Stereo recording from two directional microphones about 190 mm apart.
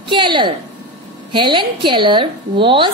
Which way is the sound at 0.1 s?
25° right (ahead or behind).